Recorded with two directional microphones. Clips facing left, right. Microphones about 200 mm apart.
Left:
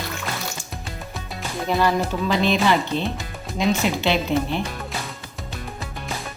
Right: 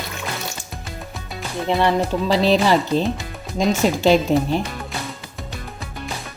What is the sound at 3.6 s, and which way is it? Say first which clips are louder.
Speech: right 3 dB; 40° right (ahead or behind).